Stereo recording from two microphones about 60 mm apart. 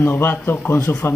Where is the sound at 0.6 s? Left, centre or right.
Left.